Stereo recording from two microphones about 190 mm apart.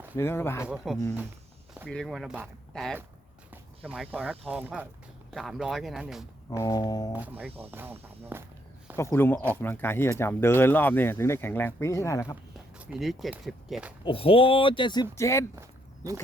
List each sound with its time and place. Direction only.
0.2 s speech: 10° left (ahead or behind)
1.9 s speech: centre (ahead or behind)
6.6 s speech: 20° left (ahead or behind)
7.1 s speech: 10° right (ahead or behind)
9.0 s speech: 15° left (ahead or behind)
12.7 s speech: 5° right (ahead or behind)
14.0 s speech: 30° left (ahead or behind)